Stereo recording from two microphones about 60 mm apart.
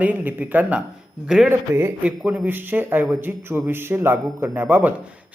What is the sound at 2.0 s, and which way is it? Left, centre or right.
A man's voice, right.